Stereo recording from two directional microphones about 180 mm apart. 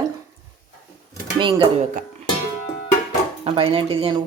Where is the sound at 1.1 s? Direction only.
25° right (ahead or behind).